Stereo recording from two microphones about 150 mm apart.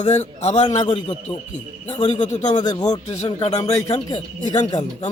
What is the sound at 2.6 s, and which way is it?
Speech, 25° left (ahead or behind).